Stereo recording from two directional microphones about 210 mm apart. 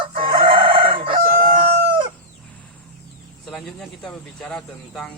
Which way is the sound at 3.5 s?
Centre (ahead or behind).